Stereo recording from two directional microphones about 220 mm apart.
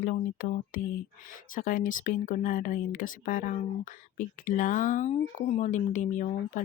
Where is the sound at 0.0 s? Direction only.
40° left (ahead or behind).